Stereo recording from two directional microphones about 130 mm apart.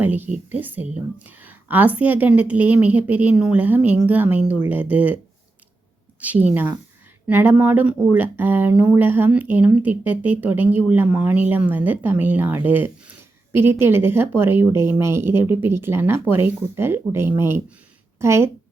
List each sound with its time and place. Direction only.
0.0 s speech: 15° right (ahead or behind)